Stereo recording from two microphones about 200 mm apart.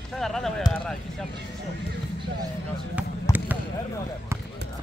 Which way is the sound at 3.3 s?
15° left (ahead or behind).